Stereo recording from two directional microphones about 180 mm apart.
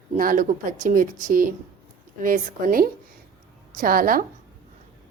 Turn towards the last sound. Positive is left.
turn(degrees=-50)  # may be behind; listen again after turning